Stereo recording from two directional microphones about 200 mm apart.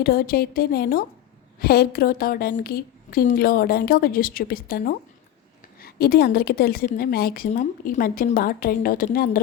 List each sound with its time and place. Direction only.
0.0 s a woman's voice: 50° left (ahead or behind)